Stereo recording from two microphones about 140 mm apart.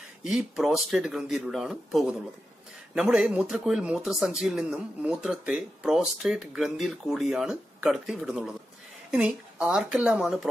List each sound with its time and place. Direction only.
0.2 s speech: 5° right (ahead or behind)